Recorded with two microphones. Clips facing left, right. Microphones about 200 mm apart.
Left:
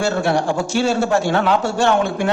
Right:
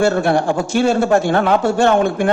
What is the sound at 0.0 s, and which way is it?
A man's voice, 55° right (ahead or behind).